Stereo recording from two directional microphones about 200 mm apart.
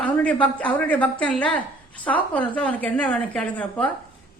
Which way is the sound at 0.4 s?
5° left (ahead or behind).